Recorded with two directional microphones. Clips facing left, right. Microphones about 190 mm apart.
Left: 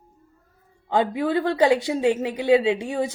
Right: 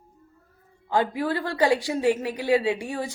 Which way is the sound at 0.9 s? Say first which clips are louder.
Left 3 dB; 25° left (ahead or behind).